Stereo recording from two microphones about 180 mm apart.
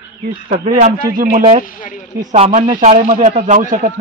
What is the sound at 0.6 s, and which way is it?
Speech, 45° right (ahead or behind).